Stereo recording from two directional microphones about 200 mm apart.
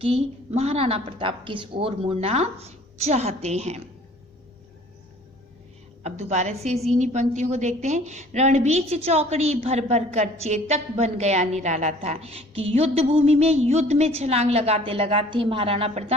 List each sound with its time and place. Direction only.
0.0 s a woman's voice: 30° right (ahead or behind)
6.0 s a woman's voice: 35° right (ahead or behind)